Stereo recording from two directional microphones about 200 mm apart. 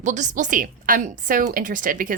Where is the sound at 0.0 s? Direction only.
35° right (ahead or behind).